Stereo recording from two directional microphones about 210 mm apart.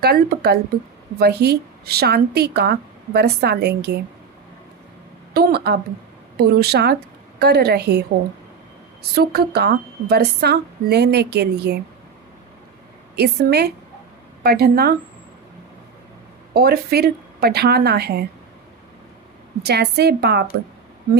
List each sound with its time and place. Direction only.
0.0 s a woman's voice: 50° right (ahead or behind)
5.3 s a woman's voice: 45° right (ahead or behind)
9.1 s a woman's voice: 50° right (ahead or behind)
13.1 s a woman's voice: 50° right (ahead or behind)
16.6 s a woman's voice: 50° right (ahead or behind)
19.6 s a woman's voice: 50° right (ahead or behind)